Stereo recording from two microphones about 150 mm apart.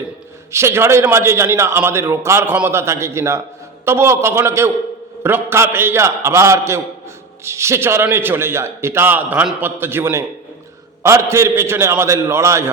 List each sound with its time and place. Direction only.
0.5 s a man's voice: 15° right (ahead or behind)